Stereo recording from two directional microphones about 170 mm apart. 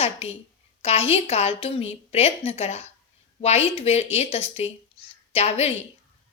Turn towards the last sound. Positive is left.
turn(degrees=35)  # may be behind; listen again after turning